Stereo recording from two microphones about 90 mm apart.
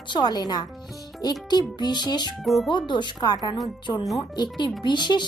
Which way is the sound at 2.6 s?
60° left (ahead or behind).